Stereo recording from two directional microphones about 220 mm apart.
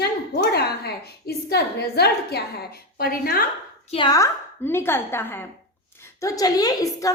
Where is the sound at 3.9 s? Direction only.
20° left (ahead or behind).